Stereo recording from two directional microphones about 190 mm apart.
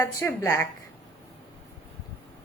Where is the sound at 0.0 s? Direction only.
15° left (ahead or behind).